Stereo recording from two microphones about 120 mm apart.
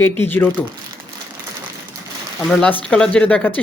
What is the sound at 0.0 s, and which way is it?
Speech, 20° left (ahead or behind).